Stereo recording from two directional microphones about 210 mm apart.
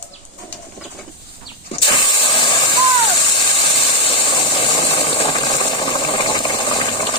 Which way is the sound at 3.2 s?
20° left (ahead or behind).